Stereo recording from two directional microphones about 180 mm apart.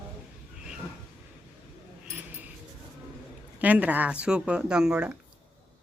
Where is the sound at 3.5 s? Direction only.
10° right (ahead or behind).